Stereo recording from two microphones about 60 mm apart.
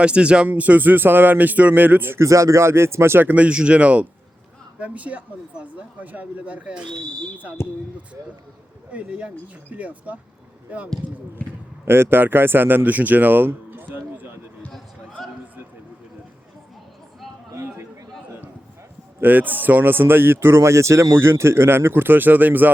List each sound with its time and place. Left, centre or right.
0.0 s speech: centre; by 2.2 s right
2.2 s speech: right
3.2 s speech: right
7.6 s speech: left
8.9 s speech: right
11.9 s speech: right
15.2 s a sound: centre
19.2 s speech: right